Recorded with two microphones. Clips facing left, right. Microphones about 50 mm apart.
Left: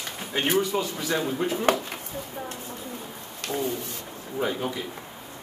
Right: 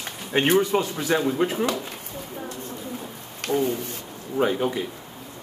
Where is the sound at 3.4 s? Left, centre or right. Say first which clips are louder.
Right 6 dB; right.